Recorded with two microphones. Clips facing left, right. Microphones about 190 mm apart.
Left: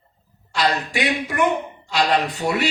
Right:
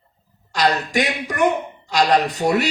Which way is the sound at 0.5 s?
40° right (ahead or behind).